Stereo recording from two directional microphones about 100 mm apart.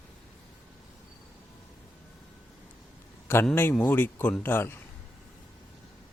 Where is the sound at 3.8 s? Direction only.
20° left (ahead or behind).